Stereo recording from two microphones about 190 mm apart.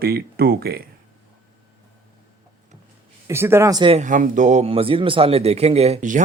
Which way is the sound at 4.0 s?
40° right (ahead or behind).